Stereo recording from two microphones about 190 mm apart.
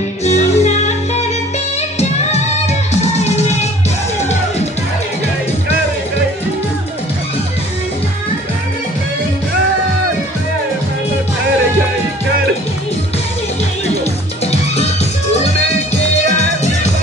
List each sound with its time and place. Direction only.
0.2 s music: 35° left (ahead or behind)
14.4 s music: 35° left (ahead or behind)